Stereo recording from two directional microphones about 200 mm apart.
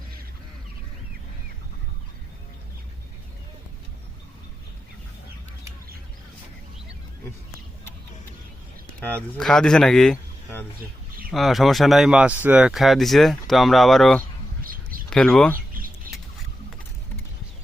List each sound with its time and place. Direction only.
9.0 s speech: 5° left (ahead or behind)
14.6 s bird: 45° right (ahead or behind)
15.1 s speech: 5° left (ahead or behind)
15.7 s bird: 45° right (ahead or behind)